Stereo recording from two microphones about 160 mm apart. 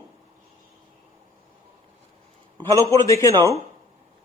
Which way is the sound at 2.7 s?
20° left (ahead or behind).